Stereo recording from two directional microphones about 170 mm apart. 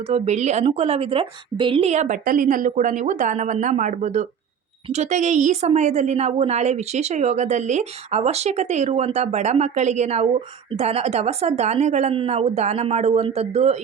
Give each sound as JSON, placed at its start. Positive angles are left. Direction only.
{"t": 0.1, "sound": "a woman's voice", "side_deg": -40}